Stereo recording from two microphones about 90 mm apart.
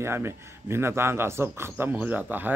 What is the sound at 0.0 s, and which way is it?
A man's voice, 30° right (ahead or behind).